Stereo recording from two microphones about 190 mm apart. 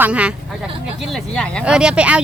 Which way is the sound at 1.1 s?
5° left (ahead or behind).